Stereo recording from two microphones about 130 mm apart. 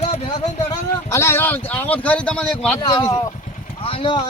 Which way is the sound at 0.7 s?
20° left (ahead or behind).